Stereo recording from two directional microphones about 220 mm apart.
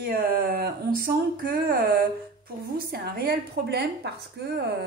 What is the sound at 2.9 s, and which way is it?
A woman's voice, 45° right (ahead or behind).